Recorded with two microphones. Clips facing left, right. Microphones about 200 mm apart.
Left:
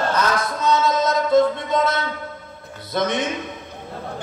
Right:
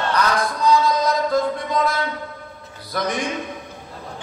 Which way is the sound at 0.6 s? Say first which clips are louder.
Right 1 dB; 25° left (ahead or behind).